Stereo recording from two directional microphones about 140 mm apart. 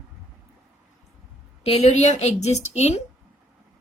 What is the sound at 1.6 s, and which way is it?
Speech, 50° left (ahead or behind).